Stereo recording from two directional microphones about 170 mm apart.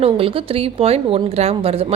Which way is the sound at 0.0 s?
35° right (ahead or behind).